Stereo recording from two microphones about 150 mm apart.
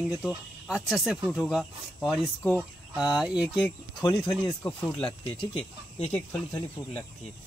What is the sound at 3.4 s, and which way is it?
Speech, 30° left (ahead or behind).